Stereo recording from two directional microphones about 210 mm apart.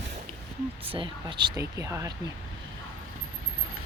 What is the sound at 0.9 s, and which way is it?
Speech, 25° right (ahead or behind).